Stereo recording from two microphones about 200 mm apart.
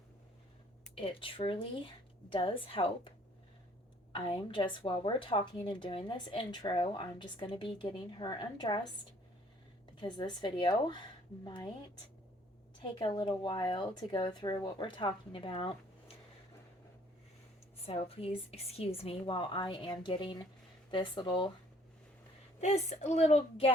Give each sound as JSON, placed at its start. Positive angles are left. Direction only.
{"t": 0.9, "sound": "a woman's voice", "side_deg": 25}
{"t": 4.1, "sound": "a woman's voice", "side_deg": 25}
{"t": 10.0, "sound": "a woman's voice", "side_deg": 20}
{"t": 17.8, "sound": "a woman's voice", "side_deg": 30}
{"t": 22.6, "sound": "a woman's voice", "side_deg": 35}